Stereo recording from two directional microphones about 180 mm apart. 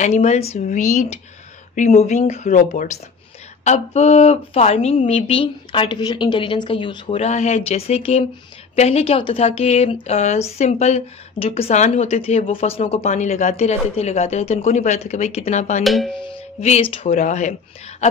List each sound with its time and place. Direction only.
0.0 s speech: 40° left (ahead or behind)
15.8 s music: centre (ahead or behind)
16.6 s speech: 35° left (ahead or behind)